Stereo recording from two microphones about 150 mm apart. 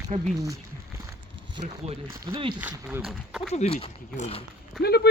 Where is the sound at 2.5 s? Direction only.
10° right (ahead or behind).